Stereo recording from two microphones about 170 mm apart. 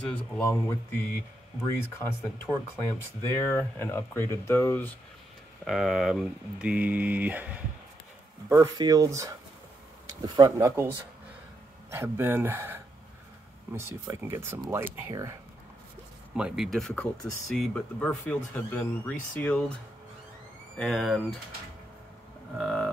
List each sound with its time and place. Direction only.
0.0 s speech: 10° left (ahead or behind)
2.4 s speech: 15° left (ahead or behind)
5.7 s speech: centre (ahead or behind)
8.5 s speech: 20° right (ahead or behind)
10.6 s speech: 15° right (ahead or behind)
16.3 s speech: 5° right (ahead or behind)
20.7 s speech: 5° left (ahead or behind)
22.6 s speech: centre (ahead or behind)